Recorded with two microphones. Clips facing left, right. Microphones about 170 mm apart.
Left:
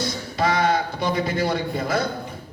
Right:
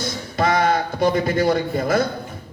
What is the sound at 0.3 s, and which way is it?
A man's voice, 50° right (ahead or behind).